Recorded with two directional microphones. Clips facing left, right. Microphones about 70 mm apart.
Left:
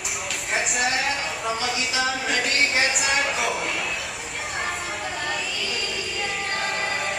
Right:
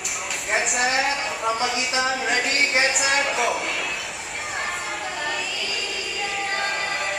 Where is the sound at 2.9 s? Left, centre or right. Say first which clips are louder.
Right 1 dB; centre.